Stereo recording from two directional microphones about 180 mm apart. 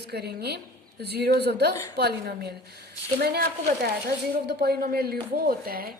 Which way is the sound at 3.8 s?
60° right (ahead or behind).